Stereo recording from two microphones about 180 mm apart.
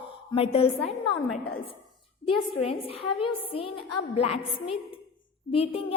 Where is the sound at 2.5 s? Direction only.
30° left (ahead or behind).